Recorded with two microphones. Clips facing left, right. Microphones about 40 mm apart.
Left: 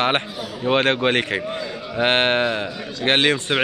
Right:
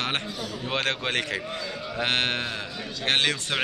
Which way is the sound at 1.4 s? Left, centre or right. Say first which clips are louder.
Left 5 dB; centre.